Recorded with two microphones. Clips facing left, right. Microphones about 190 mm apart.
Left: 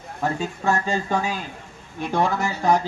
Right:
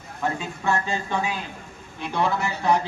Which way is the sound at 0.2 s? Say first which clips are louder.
Left 2 dB; 40° left (ahead or behind).